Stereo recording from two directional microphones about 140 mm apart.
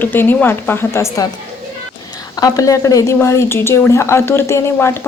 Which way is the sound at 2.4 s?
25° left (ahead or behind).